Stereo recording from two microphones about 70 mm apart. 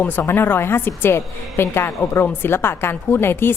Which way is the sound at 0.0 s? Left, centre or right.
Left.